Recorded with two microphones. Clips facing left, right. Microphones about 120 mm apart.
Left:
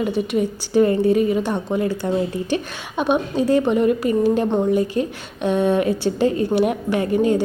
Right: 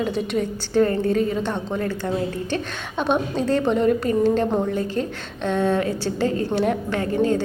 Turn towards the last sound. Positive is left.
turn(degrees=15)  # may be behind; listen again after turning